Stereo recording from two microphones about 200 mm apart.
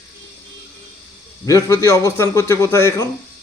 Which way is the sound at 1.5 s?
15° left (ahead or behind).